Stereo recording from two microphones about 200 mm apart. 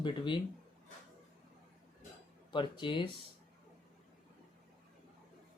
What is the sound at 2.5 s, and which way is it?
Speech, 25° left (ahead or behind).